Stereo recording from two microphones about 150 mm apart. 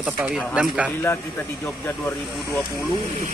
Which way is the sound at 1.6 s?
15° left (ahead or behind).